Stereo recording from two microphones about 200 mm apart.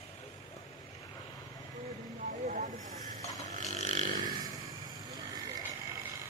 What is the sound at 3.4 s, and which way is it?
Burping, 35° right (ahead or behind).